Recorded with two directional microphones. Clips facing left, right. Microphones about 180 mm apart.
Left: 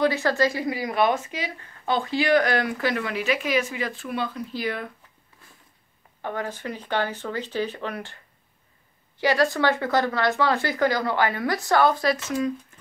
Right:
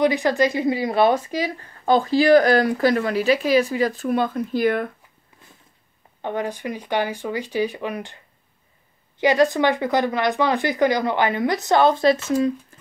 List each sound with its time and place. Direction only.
0.0 s speech: 15° right (ahead or behind); by 4.9 s 50° right (ahead or behind)
6.2 s speech: 15° right (ahead or behind)
9.2 s speech: 20° right (ahead or behind)